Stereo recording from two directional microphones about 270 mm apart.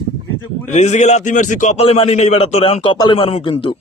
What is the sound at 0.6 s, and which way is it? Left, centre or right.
A man's voice, left.